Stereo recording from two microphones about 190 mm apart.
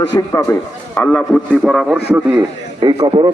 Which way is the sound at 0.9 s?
10° left (ahead or behind).